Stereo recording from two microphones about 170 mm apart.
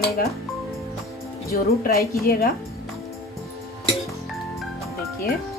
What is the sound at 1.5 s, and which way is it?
Dishes, 60° left (ahead or behind).